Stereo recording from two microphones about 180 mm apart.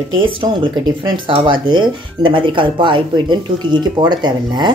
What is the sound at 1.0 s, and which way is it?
Speech, 25° right (ahead or behind).